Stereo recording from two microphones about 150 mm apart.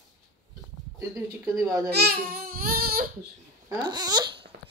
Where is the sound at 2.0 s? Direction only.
80° right.